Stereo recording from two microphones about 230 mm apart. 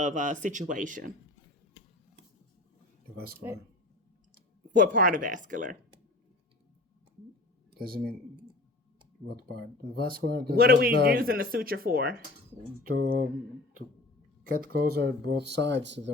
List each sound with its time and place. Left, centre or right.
0.0 s speech: right
3.3 s speech: centre
4.7 s speech: right
7.7 s speech: right
9.3 s speech: right
14.5 s speech: right